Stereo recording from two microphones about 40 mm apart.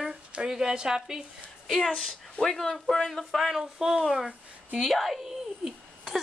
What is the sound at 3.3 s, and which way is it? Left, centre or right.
Speech, centre.